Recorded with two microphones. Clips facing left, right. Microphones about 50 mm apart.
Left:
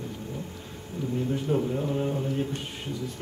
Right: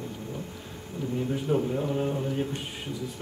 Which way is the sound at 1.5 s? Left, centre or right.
Centre.